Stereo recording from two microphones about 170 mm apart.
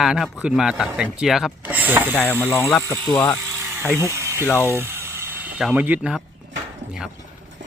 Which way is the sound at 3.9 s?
15° right (ahead or behind).